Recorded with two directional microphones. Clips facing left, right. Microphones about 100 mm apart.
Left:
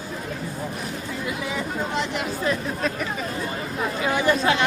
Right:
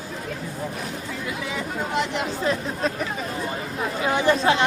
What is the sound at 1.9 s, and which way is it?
Speech, 25° right (ahead or behind).